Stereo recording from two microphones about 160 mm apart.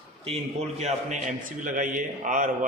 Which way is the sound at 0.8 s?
50° right (ahead or behind).